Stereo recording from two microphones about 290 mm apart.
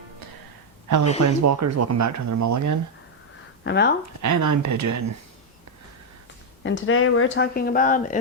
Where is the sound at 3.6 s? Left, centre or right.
Left.